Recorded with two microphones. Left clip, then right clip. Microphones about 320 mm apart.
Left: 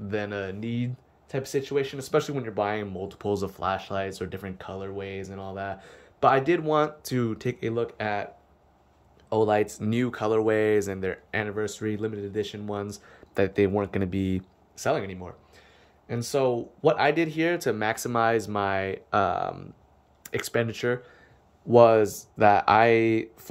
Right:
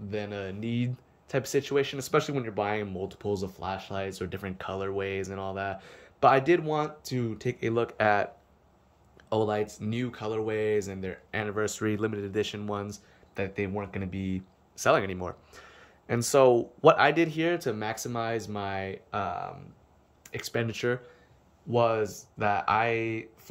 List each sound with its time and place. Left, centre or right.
0.1 s speech: centre
9.3 s speech: centre
14.8 s speech: centre
21.6 s speech: centre